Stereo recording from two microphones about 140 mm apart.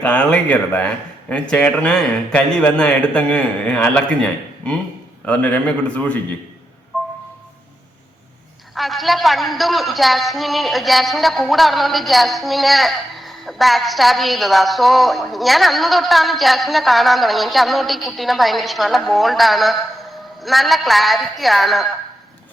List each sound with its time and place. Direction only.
0.0 s speech: 10° left (ahead or behind)
8.7 s a woman's voice: centre (ahead or behind)